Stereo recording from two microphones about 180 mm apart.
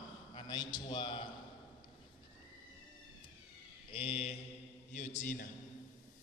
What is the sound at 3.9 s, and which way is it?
Mantra, 30° left (ahead or behind).